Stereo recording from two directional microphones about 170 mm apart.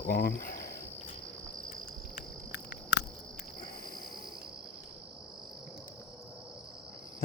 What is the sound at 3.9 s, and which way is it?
Cricket, 60° left (ahead or behind).